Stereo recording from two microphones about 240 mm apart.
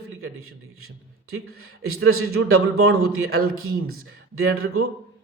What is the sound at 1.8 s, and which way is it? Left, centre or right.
Speech, right.